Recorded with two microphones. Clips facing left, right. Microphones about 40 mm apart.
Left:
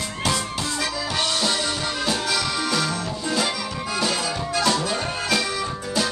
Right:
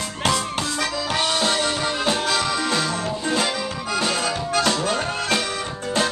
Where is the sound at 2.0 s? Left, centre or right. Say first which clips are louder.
Right 2 dB; right.